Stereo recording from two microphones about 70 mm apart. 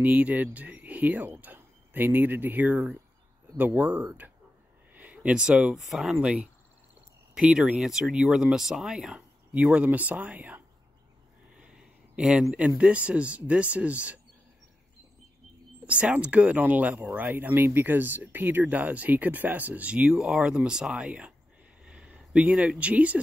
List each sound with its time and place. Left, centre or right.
0.0 s speech: right
4.9 s a sound: right
5.8 s speech: centre; by 10.6 s right
12.2 s speech: centre
15.8 s speech: centre